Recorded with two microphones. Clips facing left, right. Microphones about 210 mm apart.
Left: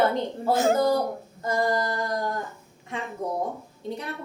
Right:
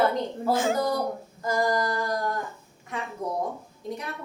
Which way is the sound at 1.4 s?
25° left (ahead or behind).